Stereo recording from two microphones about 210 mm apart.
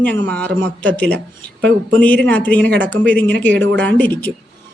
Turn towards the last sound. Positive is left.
turn(degrees=10)  # may be behind; listen again after turning